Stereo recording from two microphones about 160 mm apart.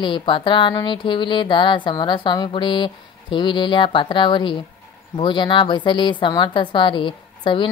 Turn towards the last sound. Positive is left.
turn(degrees=30)  # may be behind; listen again after turning